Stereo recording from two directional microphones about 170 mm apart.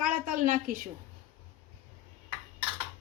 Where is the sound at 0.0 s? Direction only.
50° right (ahead or behind).